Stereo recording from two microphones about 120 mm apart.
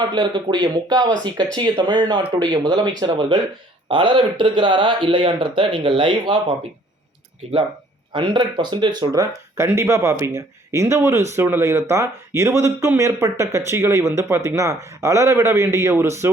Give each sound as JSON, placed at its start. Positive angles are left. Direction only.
{"t": 0.0, "sound": "speech", "side_deg": -35}
{"t": 8.1, "sound": "speech", "side_deg": -40}